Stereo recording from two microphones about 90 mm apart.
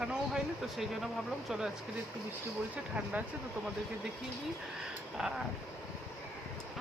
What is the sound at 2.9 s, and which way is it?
Speech, 20° right (ahead or behind).